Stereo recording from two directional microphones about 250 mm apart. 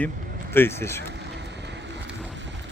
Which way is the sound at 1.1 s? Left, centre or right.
Right.